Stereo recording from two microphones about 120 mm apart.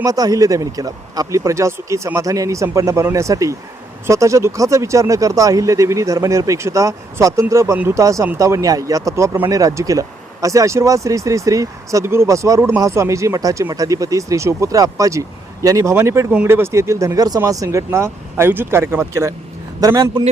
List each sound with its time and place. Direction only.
0.0 s a man's voice: 30° right (ahead or behind)